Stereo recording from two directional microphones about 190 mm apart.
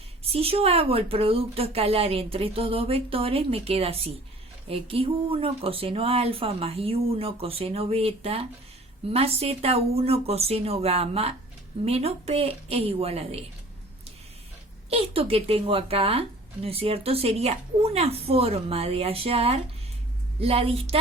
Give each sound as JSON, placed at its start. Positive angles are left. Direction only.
{"t": 0.3, "sound": "speech", "side_deg": -30}
{"t": 14.8, "sound": "speech", "side_deg": -30}